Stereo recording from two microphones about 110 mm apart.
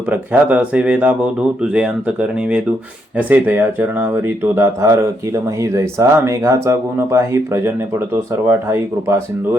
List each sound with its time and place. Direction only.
0.1 s speech: 15° right (ahead or behind)